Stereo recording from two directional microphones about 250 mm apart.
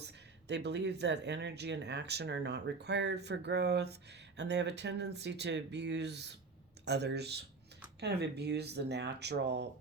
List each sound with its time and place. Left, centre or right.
0.0 s speech: right